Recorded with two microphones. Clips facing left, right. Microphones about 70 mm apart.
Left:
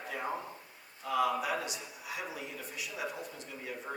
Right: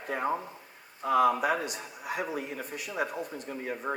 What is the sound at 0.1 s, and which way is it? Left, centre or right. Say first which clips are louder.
Speech: right 7 dB; right.